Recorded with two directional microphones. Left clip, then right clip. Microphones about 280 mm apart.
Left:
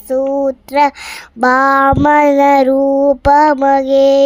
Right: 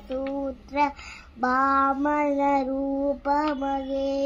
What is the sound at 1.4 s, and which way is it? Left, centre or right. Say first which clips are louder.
Child singing: left 12 dB; left.